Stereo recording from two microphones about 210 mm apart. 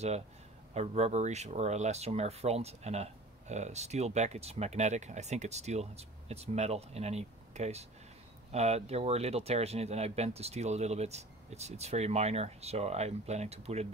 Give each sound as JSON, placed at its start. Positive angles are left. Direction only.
{"t": 0.7, "sound": "speech", "side_deg": -30}